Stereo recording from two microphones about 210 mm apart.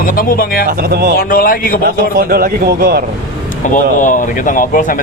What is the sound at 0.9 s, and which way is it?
Speech, 50° right (ahead or behind).